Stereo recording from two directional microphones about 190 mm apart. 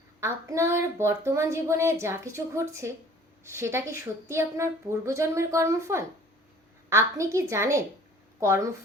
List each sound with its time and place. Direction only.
0.2 s speech: 15° right (ahead or behind)